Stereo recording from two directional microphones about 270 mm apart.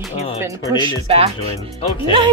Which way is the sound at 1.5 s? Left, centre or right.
Centre.